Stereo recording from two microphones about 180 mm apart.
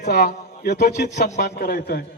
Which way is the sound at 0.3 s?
60° left (ahead or behind).